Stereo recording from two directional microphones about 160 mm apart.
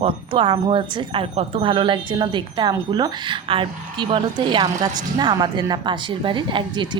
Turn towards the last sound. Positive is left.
turn(degrees=-30)  # may be behind; listen again after turning